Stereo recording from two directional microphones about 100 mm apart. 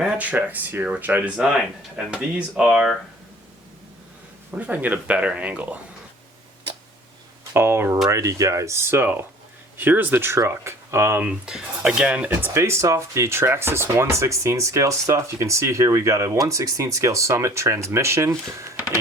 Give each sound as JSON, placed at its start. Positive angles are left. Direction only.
{"t": 0.2, "sound": "speech", "side_deg": -15}
{"t": 4.5, "sound": "speech", "side_deg": -15}
{"t": 7.5, "sound": "speech", "side_deg": -25}
{"t": 11.3, "sound": "speech", "side_deg": -5}